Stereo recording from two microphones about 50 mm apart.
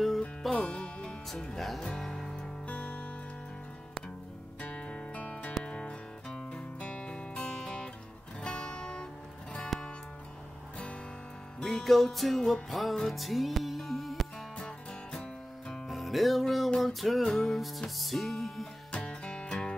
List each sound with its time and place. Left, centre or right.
0.4 s music: centre
0.7 s music: centre
2.6 s music: left
4.6 s music: left
9.7 s music: centre
11.6 s music: centre
15.7 s music: centre
19.0 s music: centre